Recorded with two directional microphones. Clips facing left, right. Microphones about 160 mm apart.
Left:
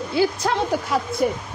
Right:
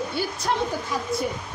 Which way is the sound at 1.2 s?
55° left (ahead or behind).